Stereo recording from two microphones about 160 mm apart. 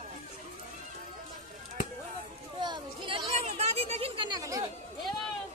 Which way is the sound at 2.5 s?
25° right (ahead or behind).